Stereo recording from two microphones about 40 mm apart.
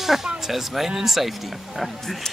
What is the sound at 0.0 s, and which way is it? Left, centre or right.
Speech, centre.